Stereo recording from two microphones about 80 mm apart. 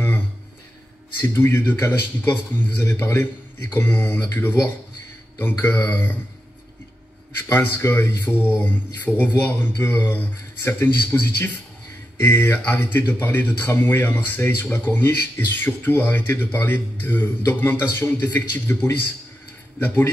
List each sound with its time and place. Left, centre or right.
1.2 s speech: left
7.3 s speech: left